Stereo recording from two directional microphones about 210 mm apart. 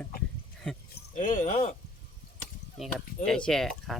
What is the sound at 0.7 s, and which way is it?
Speech, 5° left (ahead or behind).